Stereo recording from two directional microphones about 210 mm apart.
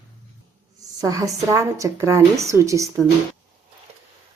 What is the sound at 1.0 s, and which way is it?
A woman's voice, 15° right (ahead or behind).